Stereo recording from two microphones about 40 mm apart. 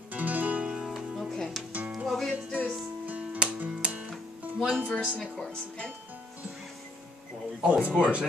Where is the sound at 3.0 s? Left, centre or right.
Right.